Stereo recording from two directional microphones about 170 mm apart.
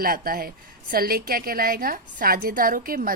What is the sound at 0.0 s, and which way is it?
A woman's voice, 60° right (ahead or behind).